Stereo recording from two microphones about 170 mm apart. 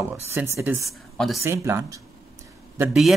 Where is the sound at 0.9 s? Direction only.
Centre (ahead or behind).